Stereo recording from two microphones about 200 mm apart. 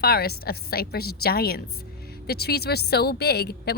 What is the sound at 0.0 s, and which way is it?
A woman's voice, 50° left (ahead or behind).